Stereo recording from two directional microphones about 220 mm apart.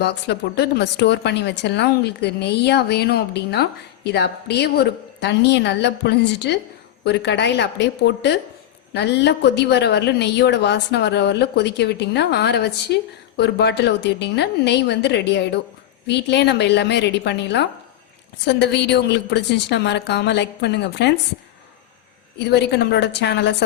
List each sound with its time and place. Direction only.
0.0 s a woman's voice: 50° left (ahead or behind)
22.4 s a woman's voice: 50° left (ahead or behind)